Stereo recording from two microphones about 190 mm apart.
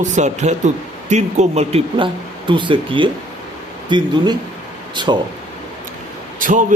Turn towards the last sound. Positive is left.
turn(degrees=-45)  # may be behind; listen again after turning